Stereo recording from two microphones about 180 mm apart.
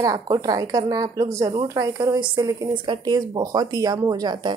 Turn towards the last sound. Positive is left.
turn(degrees=-25)  # may be behind; listen again after turning